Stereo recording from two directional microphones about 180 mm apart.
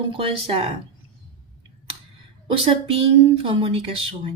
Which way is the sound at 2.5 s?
30° right (ahead or behind).